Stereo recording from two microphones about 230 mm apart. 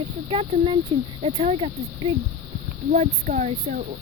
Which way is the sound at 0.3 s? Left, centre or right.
Right.